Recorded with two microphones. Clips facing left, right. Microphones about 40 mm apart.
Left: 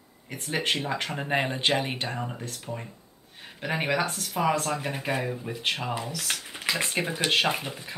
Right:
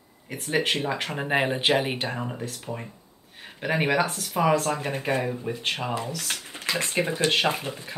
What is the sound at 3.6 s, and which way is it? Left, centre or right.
Speech, centre.